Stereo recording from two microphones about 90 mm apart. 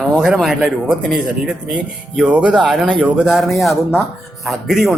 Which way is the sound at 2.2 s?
15° right (ahead or behind).